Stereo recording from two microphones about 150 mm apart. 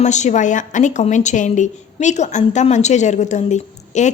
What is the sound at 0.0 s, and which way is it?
A woman's voice, 50° left (ahead or behind).